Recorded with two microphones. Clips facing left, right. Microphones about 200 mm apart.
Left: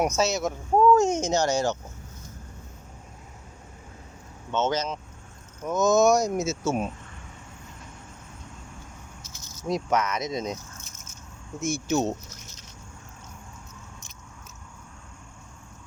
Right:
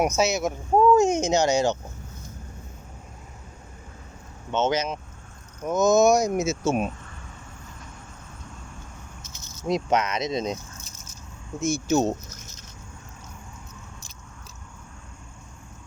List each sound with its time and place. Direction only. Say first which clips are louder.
0.0 s speech: right 2 dB; 15° right (ahead or behind)
4.5 s speech: right 2 dB; 15° right (ahead or behind)
9.9 s speech: right 1 dB; 20° right (ahead or behind)
10.2 s speech: right 3 dB; 80° right
10.8 s biting: right 2 dB; 35° right (ahead or behind)
11.6 s speech: right 3 dB; 35° right (ahead or behind)